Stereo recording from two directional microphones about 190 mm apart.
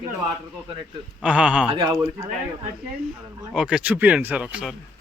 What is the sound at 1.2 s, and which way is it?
Speech, 5° right (ahead or behind).